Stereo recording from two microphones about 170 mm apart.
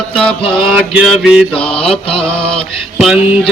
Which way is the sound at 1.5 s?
35° left (ahead or behind).